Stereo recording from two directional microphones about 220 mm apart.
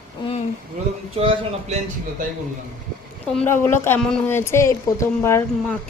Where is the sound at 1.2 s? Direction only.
25° right (ahead or behind).